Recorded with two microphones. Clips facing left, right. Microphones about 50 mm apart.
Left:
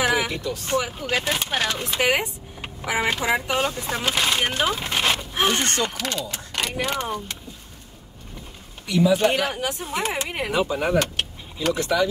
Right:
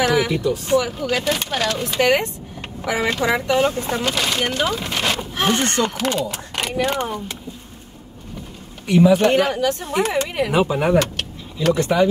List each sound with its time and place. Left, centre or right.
0.0 s vehicle: centre
0.7 s speech: left
3.6 s speech: right
4.0 s speech: centre
5.5 s speech: right
6.0 s speech: centre
6.8 s speech: centre
8.8 s speech: right
9.6 s speech: centre
10.5 s speech: right
11.7 s speech: right